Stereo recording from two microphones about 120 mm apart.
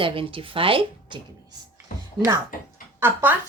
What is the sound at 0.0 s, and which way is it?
Speech, 45° right (ahead or behind).